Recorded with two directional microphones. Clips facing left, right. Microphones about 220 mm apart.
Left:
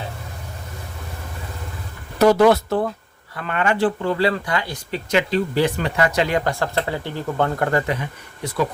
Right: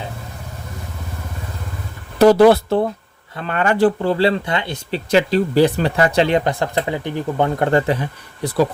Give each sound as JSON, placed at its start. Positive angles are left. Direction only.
{"t": 2.1, "sound": "speech", "side_deg": -30}